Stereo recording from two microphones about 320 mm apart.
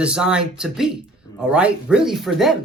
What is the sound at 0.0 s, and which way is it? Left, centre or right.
Speech, centre.